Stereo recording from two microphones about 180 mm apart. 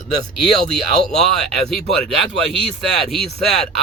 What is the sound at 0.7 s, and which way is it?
A man's voice, centre (ahead or behind).